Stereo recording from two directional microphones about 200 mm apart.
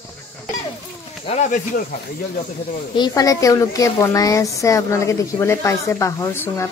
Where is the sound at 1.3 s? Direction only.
40° left (ahead or behind).